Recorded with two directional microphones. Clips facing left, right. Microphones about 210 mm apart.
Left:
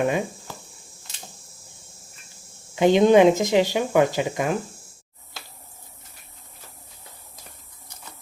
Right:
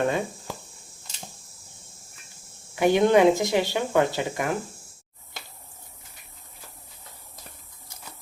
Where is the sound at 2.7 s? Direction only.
20° left (ahead or behind).